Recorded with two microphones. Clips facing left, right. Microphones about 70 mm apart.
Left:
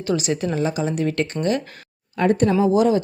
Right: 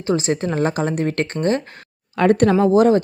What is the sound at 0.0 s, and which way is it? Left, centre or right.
A woman's voice, right.